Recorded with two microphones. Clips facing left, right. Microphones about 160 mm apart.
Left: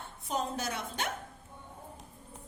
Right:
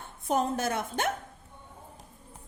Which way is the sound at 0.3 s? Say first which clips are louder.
Right 7 dB; 50° right (ahead or behind).